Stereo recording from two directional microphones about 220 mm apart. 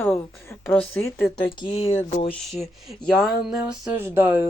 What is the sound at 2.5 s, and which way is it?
Speech, centre (ahead or behind).